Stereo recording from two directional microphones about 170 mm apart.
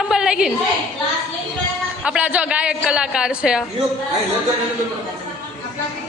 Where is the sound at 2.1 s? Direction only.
5° right (ahead or behind).